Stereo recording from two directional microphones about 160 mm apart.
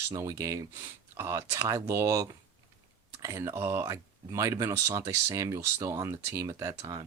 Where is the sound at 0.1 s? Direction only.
20° right (ahead or behind).